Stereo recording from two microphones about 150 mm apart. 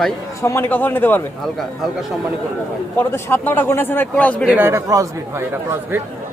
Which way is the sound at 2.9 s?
15° left (ahead or behind).